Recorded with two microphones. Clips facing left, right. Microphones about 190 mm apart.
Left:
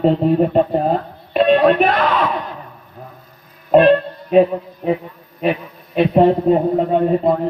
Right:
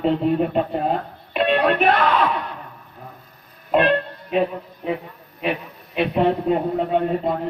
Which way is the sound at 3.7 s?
40° left (ahead or behind).